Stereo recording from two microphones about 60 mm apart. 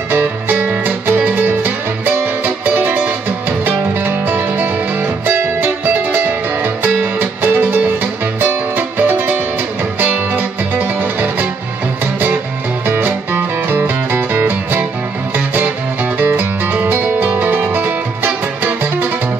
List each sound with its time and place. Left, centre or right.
0.1 s music: right
12.8 s music: right